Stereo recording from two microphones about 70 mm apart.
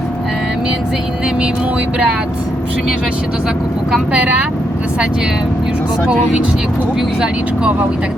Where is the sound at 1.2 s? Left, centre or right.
Centre.